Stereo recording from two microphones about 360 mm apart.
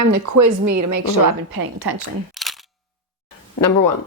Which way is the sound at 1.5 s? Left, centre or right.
Right.